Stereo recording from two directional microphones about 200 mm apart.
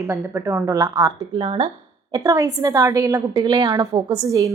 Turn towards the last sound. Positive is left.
turn(degrees=-15)  # may be behind; listen again after turning